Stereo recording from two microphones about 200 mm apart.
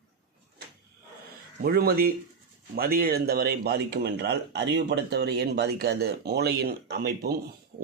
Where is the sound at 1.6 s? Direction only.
50° right (ahead or behind).